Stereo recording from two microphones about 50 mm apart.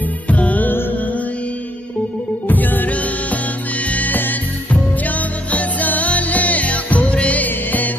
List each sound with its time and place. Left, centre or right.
0.3 s music: left
2.4 s music: left